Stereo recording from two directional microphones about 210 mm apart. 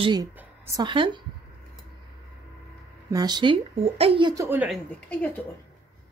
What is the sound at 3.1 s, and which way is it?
A woman's voice, 20° right (ahead or behind).